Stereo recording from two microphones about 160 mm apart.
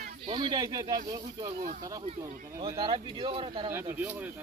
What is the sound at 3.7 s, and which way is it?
Speech, 10° right (ahead or behind).